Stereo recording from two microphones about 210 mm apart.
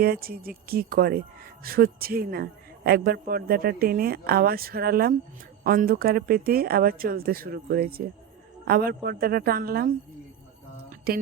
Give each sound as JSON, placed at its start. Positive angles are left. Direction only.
{"t": 0.0, "sound": "a man's voice", "side_deg": -45}
{"t": 10.8, "sound": "music", "side_deg": -45}